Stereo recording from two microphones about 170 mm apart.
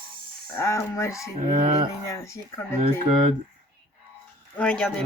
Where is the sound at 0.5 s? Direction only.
15° left (ahead or behind).